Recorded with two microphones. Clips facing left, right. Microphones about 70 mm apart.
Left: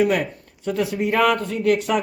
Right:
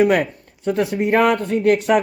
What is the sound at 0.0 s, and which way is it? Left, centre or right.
Speech, right.